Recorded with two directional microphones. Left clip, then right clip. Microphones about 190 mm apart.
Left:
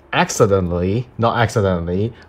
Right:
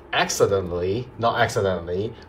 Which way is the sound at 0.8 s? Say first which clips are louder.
Left 4 dB; 20° left (ahead or behind).